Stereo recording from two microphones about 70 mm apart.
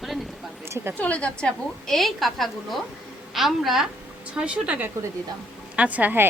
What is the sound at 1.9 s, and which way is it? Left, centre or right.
A woman's voice, centre.